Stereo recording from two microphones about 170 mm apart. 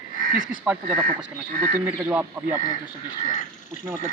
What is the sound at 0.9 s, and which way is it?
Speech, 55° right (ahead or behind).